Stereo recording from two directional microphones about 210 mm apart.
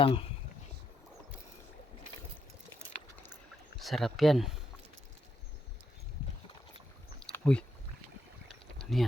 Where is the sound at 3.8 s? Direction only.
Centre (ahead or behind).